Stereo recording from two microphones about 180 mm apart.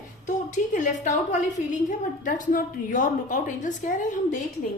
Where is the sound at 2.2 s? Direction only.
45° left (ahead or behind).